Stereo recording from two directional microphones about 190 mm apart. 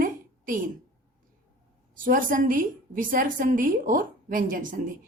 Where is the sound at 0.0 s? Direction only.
45° right (ahead or behind).